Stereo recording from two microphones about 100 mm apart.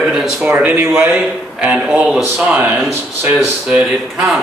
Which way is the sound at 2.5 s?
20° right (ahead or behind).